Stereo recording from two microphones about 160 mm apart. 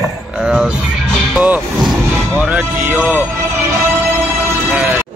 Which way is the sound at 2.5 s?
10° right (ahead or behind).